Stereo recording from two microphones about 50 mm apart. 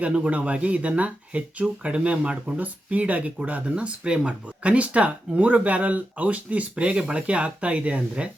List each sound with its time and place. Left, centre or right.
0.1 s speech: centre